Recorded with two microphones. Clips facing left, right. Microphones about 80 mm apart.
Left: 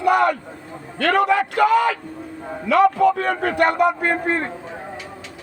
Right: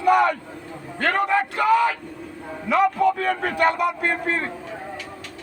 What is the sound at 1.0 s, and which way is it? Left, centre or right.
A man's voice, left.